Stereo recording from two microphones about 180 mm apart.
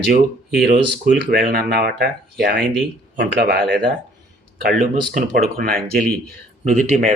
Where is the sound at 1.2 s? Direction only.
55° right (ahead or behind).